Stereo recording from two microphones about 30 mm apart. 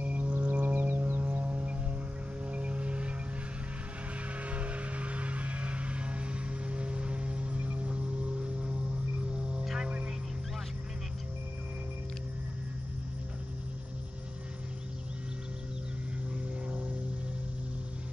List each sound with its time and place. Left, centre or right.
0.0 s music: right
0.3 s music: right
1.2 s music: right
4.5 s a sound: right
9.3 s hum: right